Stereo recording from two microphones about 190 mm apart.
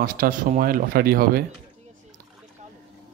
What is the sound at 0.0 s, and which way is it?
Speech, 50° right (ahead or behind).